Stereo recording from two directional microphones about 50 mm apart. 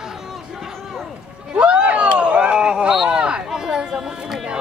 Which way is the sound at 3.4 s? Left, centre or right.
Centre.